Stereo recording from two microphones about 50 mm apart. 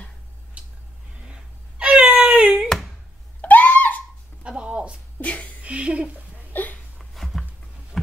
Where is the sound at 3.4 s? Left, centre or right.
Left.